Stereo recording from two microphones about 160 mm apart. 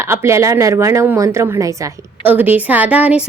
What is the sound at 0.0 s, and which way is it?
Speech, 15° right (ahead or behind).